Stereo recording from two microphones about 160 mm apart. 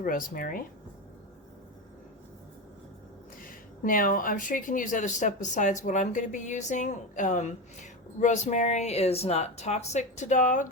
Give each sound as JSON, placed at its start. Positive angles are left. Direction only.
{"t": 0.0, "sound": "speech", "side_deg": 60}
{"t": 3.4, "sound": "speech", "side_deg": 60}